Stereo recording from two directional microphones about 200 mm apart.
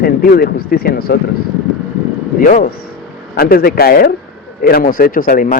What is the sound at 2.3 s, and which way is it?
Speech, 40° left (ahead or behind).